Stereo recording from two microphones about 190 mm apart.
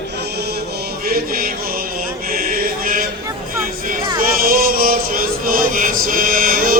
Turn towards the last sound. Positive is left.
turn(degrees=-50)  # may be behind; listen again after turning